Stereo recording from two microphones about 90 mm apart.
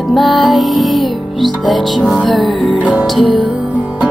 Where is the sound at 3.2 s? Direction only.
70° left (ahead or behind).